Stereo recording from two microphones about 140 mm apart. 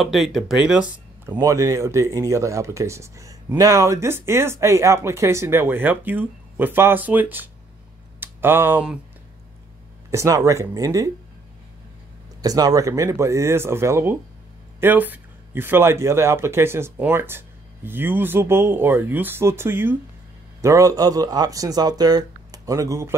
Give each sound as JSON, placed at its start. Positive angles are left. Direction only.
{"t": 0.0, "sound": "speech", "side_deg": 0}
{"t": 1.4, "sound": "speech", "side_deg": -20}
{"t": 10.1, "sound": "speech", "side_deg": -20}
{"t": 12.4, "sound": "speech", "side_deg": -25}